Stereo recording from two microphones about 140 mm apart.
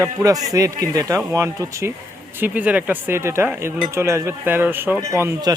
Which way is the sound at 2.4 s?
10° right (ahead or behind).